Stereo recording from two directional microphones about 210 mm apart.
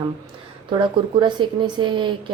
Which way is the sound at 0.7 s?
20° right (ahead or behind).